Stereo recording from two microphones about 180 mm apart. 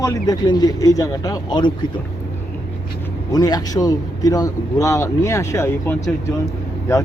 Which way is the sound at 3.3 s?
20° left (ahead or behind).